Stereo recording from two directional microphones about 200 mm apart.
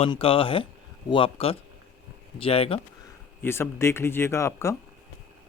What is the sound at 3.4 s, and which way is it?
Speech, 10° left (ahead or behind).